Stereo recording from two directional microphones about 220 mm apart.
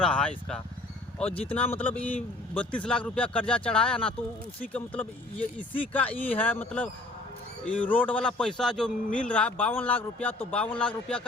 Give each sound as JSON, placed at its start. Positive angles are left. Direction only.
{"t": 0.0, "sound": "speech", "side_deg": 5}